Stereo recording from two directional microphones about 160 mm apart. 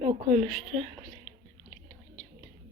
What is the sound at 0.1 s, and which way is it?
Speech, 40° right (ahead or behind).